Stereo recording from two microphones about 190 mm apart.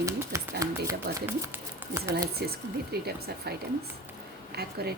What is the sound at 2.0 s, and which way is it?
Speech, 15° right (ahead or behind).